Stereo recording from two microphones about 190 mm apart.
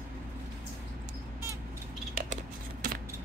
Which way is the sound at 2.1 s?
45° right (ahead or behind).